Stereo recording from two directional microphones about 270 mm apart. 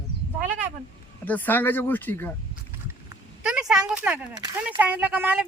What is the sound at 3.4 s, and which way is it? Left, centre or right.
Speech, centre.